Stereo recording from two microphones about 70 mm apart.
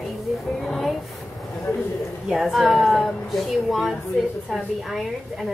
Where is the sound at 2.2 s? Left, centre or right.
Centre.